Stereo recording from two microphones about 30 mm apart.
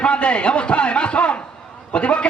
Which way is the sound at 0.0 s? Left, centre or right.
Left.